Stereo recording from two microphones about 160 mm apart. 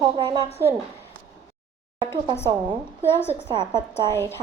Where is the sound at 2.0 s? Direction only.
30° right (ahead or behind).